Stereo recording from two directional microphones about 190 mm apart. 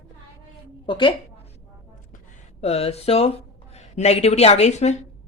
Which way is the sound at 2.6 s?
30° left (ahead or behind).